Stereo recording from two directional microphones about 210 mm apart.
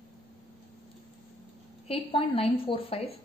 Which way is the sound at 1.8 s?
25° left (ahead or behind).